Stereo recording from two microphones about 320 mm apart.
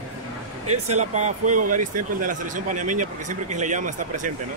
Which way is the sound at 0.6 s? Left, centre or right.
Right.